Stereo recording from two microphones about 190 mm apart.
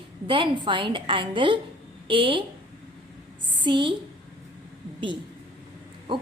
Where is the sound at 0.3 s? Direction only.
25° right (ahead or behind).